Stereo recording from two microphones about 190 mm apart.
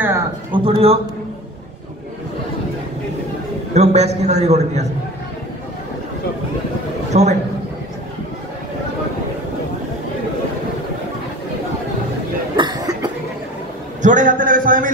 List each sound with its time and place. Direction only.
0.5 s a man's voice: 30° right (ahead or behind)
3.7 s a man's voice: 35° right (ahead or behind)
7.1 s a man's voice: 35° right (ahead or behind)
12.5 s cough: 20° right (ahead or behind)
14.0 s a man's voice: 40° right (ahead or behind)